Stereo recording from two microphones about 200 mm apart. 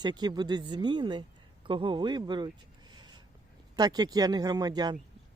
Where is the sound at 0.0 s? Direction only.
20° right (ahead or behind).